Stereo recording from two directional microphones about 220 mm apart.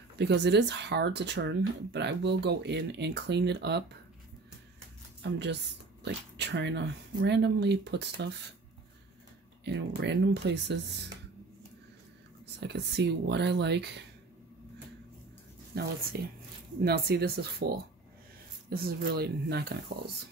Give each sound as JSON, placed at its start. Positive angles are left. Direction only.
{"t": 0.2, "sound": "speech", "side_deg": -50}
{"t": 5.2, "sound": "speech", "side_deg": -50}
{"t": 9.7, "sound": "speech", "side_deg": -50}
{"t": 12.5, "sound": "speech", "side_deg": -50}
{"t": 15.7, "sound": "speech", "side_deg": -45}